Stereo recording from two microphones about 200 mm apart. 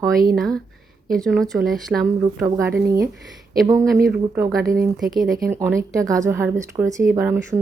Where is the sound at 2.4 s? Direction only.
15° right (ahead or behind).